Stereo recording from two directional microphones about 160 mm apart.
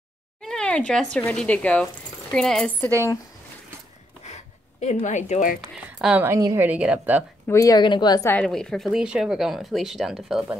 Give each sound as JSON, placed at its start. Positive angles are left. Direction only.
{"t": 0.4, "sound": "a sound", "side_deg": 5}
{"t": 1.1, "sound": "a woman's voice", "side_deg": 5}
{"t": 4.2, "sound": "a sound", "side_deg": 45}
{"t": 5.9, "sound": "a woman's voice", "side_deg": -5}
{"t": 6.2, "sound": "a woman's voice", "side_deg": -20}
{"t": 7.4, "sound": "a woman's voice", "side_deg": 20}
{"t": 8.3, "sound": "speech", "side_deg": 5}